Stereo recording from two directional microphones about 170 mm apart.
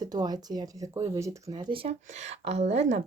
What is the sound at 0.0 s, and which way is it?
A woman's voice, 25° right (ahead or behind).